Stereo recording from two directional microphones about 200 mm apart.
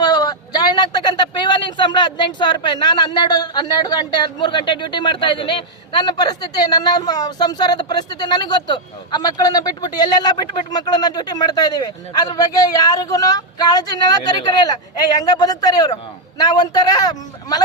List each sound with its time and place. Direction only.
0.0 s speech: 20° left (ahead or behind)